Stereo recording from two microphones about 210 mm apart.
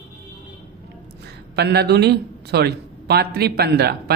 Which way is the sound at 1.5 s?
50° right (ahead or behind).